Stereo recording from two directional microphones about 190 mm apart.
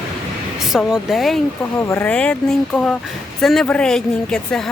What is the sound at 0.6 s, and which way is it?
Speech, centre (ahead or behind).